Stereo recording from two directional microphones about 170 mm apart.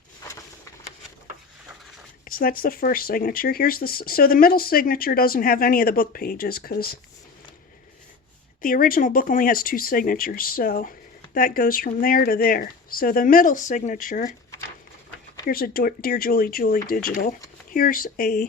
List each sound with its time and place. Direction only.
2.2 s speech: 55° left (ahead or behind)
8.6 s speech: 55° left (ahead or behind)
15.4 s speech: 60° left (ahead or behind)